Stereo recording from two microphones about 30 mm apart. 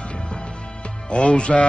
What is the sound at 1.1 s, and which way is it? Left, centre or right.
Speech, left.